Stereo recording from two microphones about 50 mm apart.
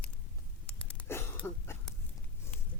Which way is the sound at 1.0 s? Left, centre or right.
Left.